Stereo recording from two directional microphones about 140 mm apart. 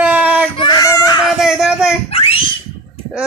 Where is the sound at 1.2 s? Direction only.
5° right (ahead or behind).